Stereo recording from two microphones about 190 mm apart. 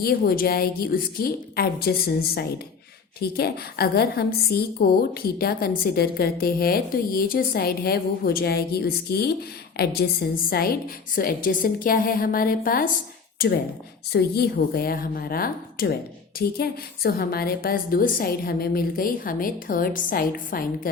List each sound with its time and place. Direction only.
0.0 s a woman's voice: 50° left (ahead or behind)